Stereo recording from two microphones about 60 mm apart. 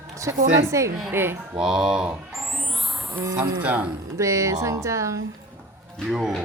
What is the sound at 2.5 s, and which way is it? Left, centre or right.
Music, centre.